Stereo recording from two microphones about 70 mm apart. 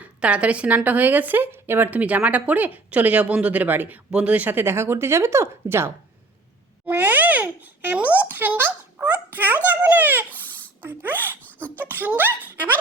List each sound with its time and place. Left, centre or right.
0.0 s a woman's voice: centre
11.6 s a child's voice: left
11.9 s speech: right